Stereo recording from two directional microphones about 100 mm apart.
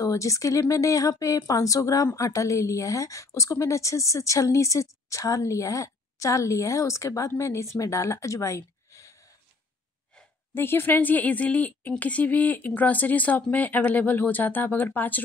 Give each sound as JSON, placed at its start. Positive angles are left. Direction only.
{"t": 0.0, "sound": "a woman's voice", "side_deg": 30}
{"t": 10.5, "sound": "a woman's voice", "side_deg": 20}